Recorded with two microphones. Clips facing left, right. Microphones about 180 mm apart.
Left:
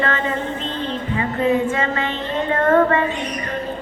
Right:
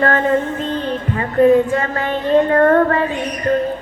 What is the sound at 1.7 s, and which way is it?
A woman's voice, 50° right (ahead or behind).